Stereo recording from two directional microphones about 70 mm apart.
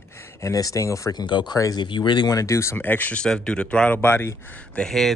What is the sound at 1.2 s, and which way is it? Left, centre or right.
Speech, left.